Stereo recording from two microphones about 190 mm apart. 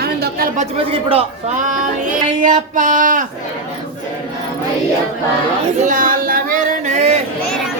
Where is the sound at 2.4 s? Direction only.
40° right (ahead or behind).